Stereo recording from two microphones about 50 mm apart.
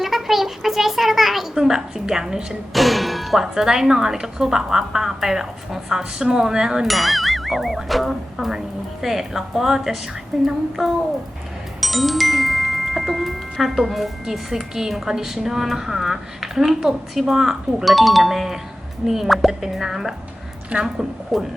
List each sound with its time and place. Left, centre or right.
0.0 s a child's voice: centre
6.8 s a child's voice: centre
20.7 s a woman's voice: right
21.3 s speech: centre